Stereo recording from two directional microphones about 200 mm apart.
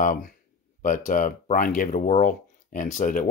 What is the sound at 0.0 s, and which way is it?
Speech, 40° left (ahead or behind).